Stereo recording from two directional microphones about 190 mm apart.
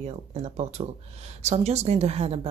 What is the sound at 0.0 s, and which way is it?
A woman's voice, 35° right (ahead or behind).